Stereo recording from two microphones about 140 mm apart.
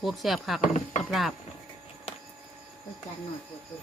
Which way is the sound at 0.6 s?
60° left (ahead or behind).